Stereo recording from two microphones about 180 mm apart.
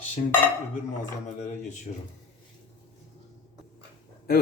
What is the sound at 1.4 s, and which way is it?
Speech, 40° left (ahead or behind).